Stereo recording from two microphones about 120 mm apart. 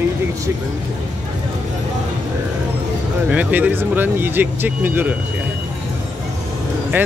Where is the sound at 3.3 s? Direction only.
10° right (ahead or behind).